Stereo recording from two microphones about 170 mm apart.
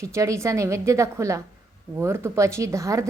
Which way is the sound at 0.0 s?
20° right (ahead or behind).